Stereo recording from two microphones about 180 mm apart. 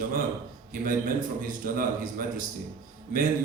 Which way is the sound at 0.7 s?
50° right (ahead or behind).